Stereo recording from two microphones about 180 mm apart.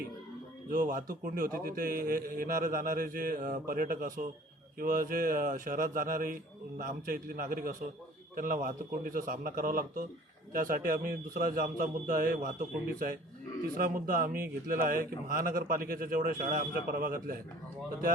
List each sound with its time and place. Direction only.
0.7 s a man's voice: 50° right (ahead or behind)
13.7 s a man's voice: 50° right (ahead or behind)